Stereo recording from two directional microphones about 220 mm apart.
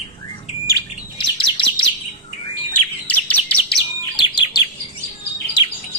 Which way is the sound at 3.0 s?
5° left (ahead or behind).